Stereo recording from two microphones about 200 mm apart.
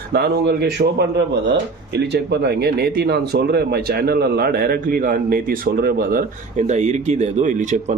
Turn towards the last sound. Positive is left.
turn(degrees=-35)  # may be behind; listen again after turning